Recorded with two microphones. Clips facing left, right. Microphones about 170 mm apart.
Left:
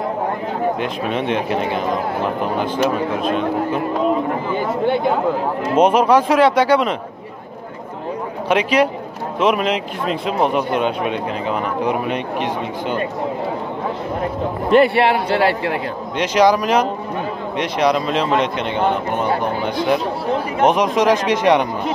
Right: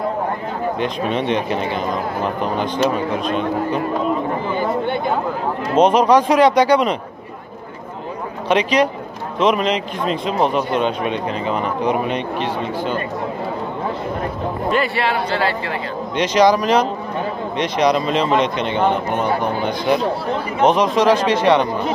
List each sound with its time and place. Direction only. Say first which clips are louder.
0.7 s speech: right 1 dB; 5° left (ahead or behind)
5.8 s speech: right 1 dB; 5° left (ahead or behind)
8.5 s speech: even; 5° left (ahead or behind)
14.7 s a man's voice: left 7 dB; 65° left (ahead or behind)
16.2 s speech: even; 5° left (ahead or behind)